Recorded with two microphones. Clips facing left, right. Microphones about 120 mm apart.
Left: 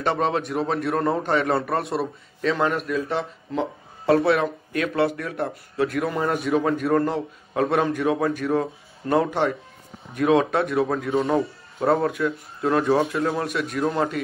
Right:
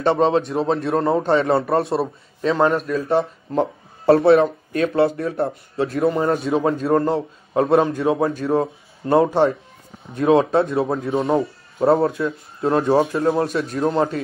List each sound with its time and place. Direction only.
0.0 s a man's voice: 30° right (ahead or behind)